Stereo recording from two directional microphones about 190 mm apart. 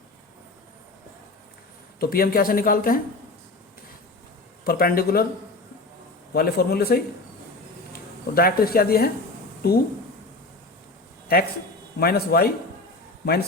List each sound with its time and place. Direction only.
2.0 s speech: 50° left (ahead or behind)
4.6 s speech: 50° left (ahead or behind)
6.3 s a man's voice: 55° left (ahead or behind)
8.4 s a man's voice: 50° left (ahead or behind)
11.3 s speech: 55° left (ahead or behind)